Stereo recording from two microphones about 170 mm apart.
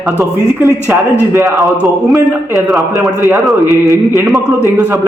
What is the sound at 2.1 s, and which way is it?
Speech, centre (ahead or behind).